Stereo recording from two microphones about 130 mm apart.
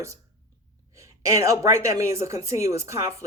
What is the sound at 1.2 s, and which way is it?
Speech, 25° right (ahead or behind).